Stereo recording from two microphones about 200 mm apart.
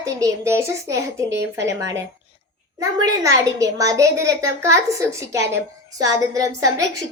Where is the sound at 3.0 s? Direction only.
15° right (ahead or behind).